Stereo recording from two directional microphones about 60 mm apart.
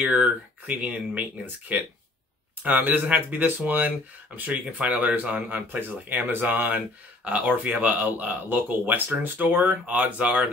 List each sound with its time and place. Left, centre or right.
0.0 s speech: right